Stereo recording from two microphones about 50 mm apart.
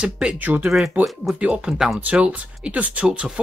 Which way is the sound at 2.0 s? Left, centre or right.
Right.